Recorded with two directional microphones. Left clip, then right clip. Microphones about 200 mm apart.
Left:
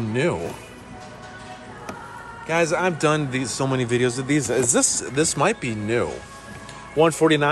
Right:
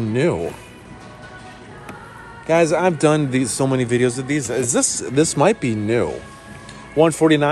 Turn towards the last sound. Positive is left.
turn(degrees=15)  # may be behind; listen again after turning